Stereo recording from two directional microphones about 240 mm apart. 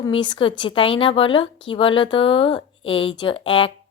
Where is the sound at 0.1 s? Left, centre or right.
Left.